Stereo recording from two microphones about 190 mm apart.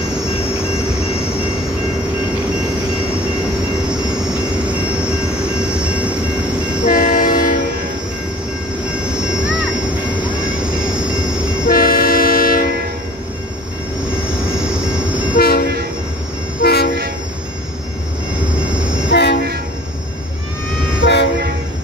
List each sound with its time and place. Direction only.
5.6 s train: 5° right (ahead or behind)
6.8 s train: 45° left (ahead or behind)
10.9 s train: 5° right (ahead or behind)
11.6 s train: 50° left (ahead or behind)
14.6 s train: 5° right (ahead or behind)
15.3 s train: 55° left (ahead or behind)
16.6 s train: 55° left (ahead or behind)
19.0 s train: 60° left (ahead or behind)
21.0 s train: 65° left (ahead or behind)